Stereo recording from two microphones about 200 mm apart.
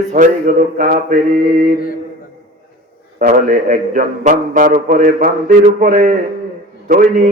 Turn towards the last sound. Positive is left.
turn(degrees=-40)  # may be behind; listen again after turning